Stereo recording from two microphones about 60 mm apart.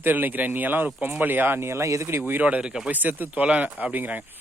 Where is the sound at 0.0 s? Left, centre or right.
Right.